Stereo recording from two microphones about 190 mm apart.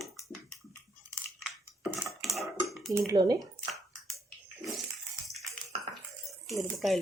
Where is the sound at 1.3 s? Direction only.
Centre (ahead or behind).